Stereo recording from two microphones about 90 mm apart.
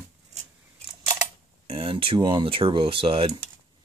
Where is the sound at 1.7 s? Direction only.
85° right.